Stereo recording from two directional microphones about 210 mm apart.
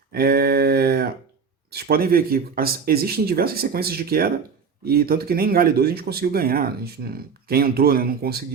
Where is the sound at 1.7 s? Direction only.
45° right (ahead or behind).